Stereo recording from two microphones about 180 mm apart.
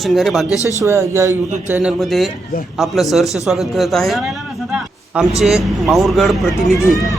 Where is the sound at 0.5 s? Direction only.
15° left (ahead or behind).